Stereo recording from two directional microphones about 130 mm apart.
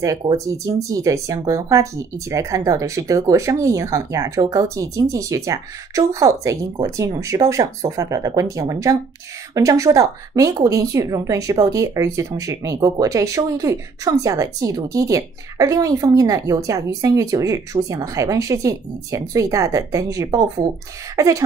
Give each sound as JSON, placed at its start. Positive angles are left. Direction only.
{"t": 0.5, "sound": "speech", "side_deg": -25}